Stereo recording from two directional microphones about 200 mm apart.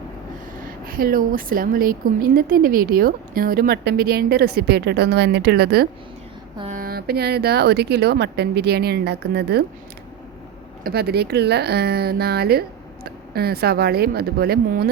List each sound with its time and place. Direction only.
0.9 s a woman's voice: 45° right (ahead or behind)
10.8 s a woman's voice: 50° right (ahead or behind)